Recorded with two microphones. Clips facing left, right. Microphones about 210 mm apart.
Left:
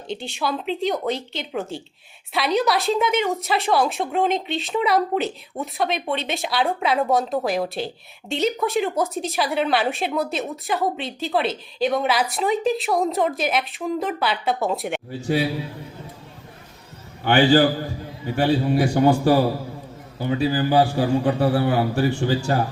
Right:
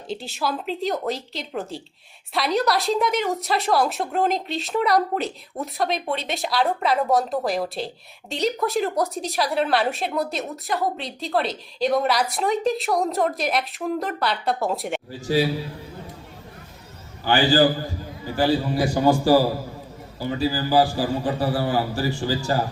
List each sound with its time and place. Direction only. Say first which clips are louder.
0.1 s a woman's voice: left 1 dB; centre (ahead or behind)
17.2 s a man's voice: left 2 dB; 60° left (ahead or behind)